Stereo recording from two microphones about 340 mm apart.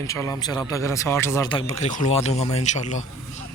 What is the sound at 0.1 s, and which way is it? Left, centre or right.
A man's voice, centre.